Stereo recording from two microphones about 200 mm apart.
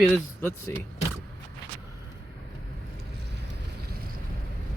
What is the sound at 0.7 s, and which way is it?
Speech, 10° left (ahead or behind).